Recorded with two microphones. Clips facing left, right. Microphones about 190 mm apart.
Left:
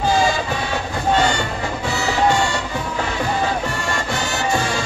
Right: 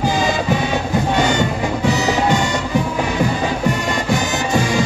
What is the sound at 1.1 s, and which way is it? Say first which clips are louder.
Music: even; 15° right (ahead or behind).